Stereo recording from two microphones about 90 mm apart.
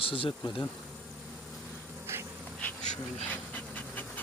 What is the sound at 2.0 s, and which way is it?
Insect, 30° right (ahead or behind).